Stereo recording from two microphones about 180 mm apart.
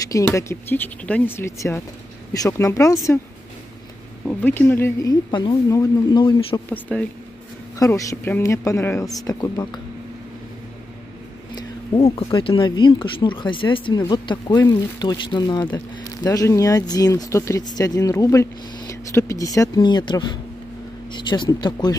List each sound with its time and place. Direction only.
0.0 s speech: 15° left (ahead or behind)
4.3 s speech: 10° left (ahead or behind)
6.7 s speech: 5° left (ahead or behind)
11.5 s speech: 30° left (ahead or behind)